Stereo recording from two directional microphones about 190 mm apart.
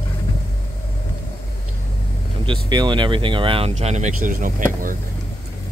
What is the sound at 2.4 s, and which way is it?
Speech, 25° right (ahead or behind).